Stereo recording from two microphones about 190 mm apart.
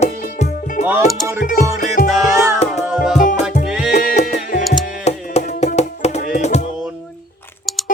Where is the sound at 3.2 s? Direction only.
45° left (ahead or behind).